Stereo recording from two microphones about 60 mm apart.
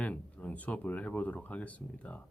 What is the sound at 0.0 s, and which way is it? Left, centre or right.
A man's voice, left.